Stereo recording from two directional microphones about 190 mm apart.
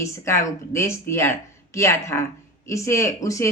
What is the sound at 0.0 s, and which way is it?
Speech, 15° left (ahead or behind).